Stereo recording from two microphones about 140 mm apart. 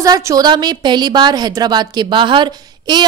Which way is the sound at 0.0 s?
25° right (ahead or behind).